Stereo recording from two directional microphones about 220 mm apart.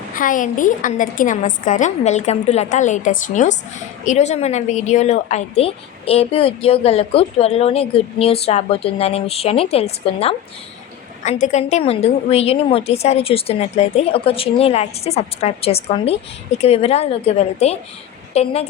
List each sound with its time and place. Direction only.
0.1 s a woman's voice: 35° left (ahead or behind)